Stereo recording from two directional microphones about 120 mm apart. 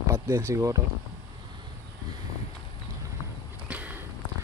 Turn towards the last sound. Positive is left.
turn(degrees=-15)  # may be behind; listen again after turning